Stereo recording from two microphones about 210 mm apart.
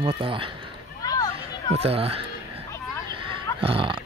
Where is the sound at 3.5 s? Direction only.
25° right (ahead or behind).